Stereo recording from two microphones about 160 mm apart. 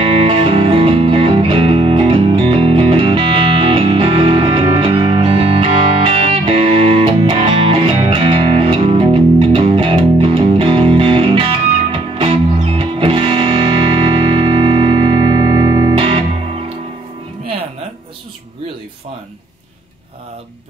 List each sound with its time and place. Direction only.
0.0 s music: 35° right (ahead or behind)